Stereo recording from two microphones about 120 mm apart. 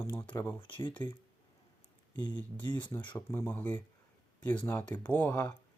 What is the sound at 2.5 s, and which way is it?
Speech, 45° right (ahead or behind).